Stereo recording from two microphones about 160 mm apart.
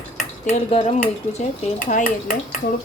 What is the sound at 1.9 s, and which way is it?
Speech, 60° left (ahead or behind).